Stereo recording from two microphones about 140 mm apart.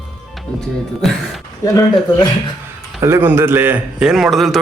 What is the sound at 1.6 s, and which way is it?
Speech, 25° left (ahead or behind).